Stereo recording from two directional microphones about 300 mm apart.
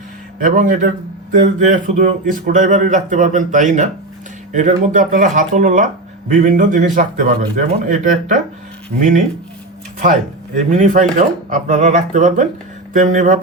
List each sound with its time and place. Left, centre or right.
0.3 s speech: right
10.7 s speech: right